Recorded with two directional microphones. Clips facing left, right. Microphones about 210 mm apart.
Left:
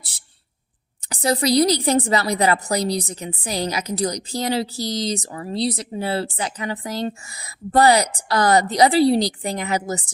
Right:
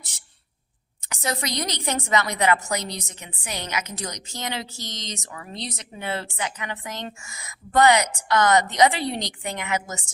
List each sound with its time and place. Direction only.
1.1 s a woman's voice: 35° left (ahead or behind)